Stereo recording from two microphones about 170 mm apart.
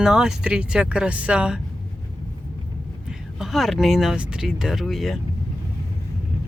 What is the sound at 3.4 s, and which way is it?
Speech, centre (ahead or behind).